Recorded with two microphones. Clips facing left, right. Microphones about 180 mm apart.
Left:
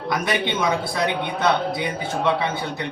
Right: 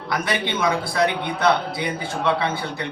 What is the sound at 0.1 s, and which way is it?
A man's voice, 20° left (ahead or behind).